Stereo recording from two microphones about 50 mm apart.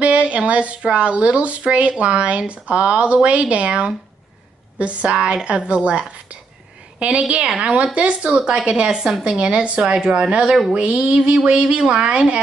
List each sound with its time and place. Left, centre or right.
0.0 s a woman's voice: right